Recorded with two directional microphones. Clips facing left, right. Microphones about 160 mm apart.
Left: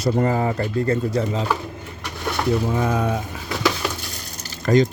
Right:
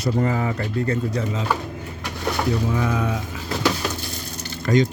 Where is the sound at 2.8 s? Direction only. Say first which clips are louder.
Left 2 dB; 45° left (ahead or behind).